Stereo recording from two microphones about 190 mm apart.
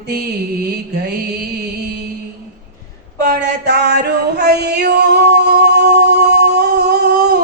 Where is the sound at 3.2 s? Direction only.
60° right (ahead or behind).